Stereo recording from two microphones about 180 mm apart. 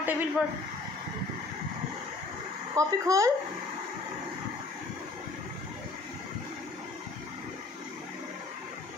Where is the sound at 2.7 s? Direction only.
15° right (ahead or behind).